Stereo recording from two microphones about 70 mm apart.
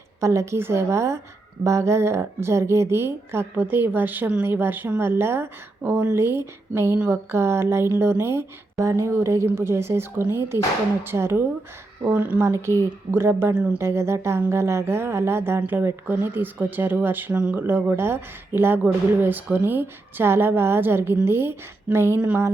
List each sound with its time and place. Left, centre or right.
0.2 s a woman's voice: right
17.3 s a woman's voice: centre; by 21.5 s right